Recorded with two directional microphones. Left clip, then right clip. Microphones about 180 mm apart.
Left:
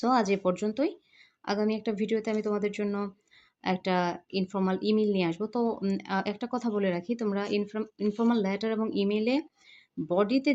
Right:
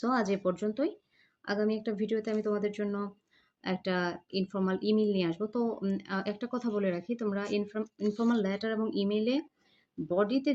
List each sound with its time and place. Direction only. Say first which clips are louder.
0.0 s a woman's voice: left 4 dB; 25° left (ahead or behind)